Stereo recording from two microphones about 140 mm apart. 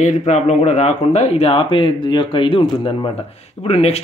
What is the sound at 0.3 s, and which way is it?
Speech, 55° left (ahead or behind).